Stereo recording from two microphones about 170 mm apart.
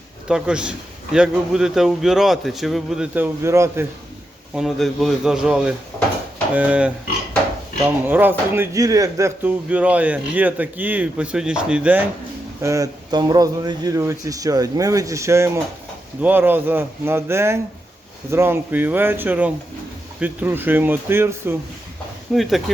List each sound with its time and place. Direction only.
0.3 s a man's voice: 5° right (ahead or behind)
3.4 s speech: 15° right (ahead or behind)
4.5 s a man's voice: centre (ahead or behind)
12.6 s speech: 20° right (ahead or behind)
22.3 s a man's voice: centre (ahead or behind)